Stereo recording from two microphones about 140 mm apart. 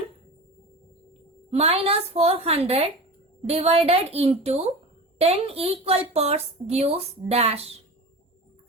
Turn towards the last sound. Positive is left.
turn(degrees=-45)  # may be behind; listen again after turning